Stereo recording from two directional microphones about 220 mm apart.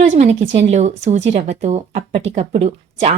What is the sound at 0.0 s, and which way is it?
Speech, 30° right (ahead or behind).